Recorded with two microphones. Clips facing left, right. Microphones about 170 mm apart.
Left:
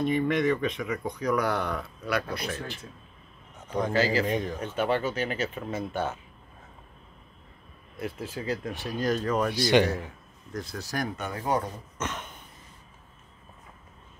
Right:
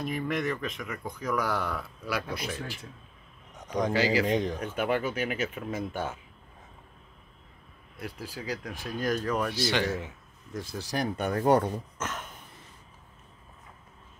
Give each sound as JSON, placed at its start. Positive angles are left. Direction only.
{"t": 0.0, "sound": "speech", "side_deg": 0}
{"t": 8.0, "sound": "speech", "side_deg": -5}
{"t": 9.5, "sound": "speech", "side_deg": 15}
{"t": 10.5, "sound": "speech", "side_deg": -5}
{"t": 11.3, "sound": "speech", "side_deg": -65}
{"t": 12.0, "sound": "throat clearing", "side_deg": 0}